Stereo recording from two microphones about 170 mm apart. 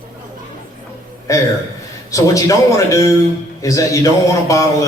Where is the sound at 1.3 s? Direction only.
20° left (ahead or behind).